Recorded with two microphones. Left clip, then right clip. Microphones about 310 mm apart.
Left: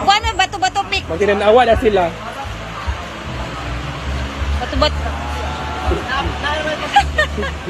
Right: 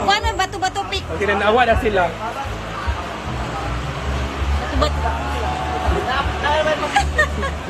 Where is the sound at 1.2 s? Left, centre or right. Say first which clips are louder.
Left 4 dB; left.